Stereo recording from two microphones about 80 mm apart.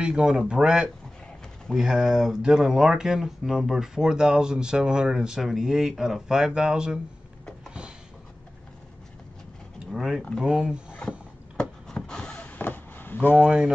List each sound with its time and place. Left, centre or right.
0.0 s speech: centre
9.9 s speech: centre
11.0 s a sound: centre
12.4 s chop: left
13.4 s speech: centre